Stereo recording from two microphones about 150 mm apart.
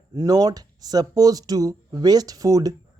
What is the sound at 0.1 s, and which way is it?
Speech, 20° right (ahead or behind).